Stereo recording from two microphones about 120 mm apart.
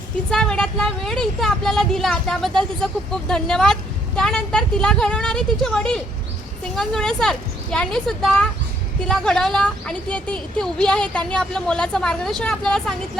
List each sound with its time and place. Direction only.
0.3 s speech: 5° left (ahead or behind)